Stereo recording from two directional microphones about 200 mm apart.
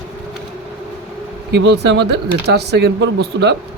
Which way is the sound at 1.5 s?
60° right (ahead or behind).